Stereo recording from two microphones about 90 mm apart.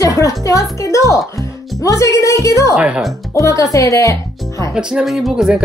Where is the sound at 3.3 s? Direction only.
35° left (ahead or behind).